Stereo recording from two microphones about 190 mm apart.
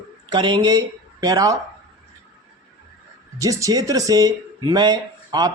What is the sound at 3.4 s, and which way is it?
Speech, 15° right (ahead or behind).